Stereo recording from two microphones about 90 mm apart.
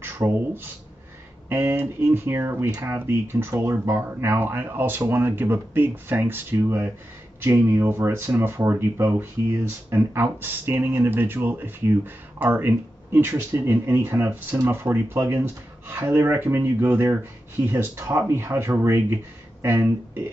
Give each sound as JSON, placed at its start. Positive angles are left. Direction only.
{"t": 0.0, "sound": "speech", "side_deg": -25}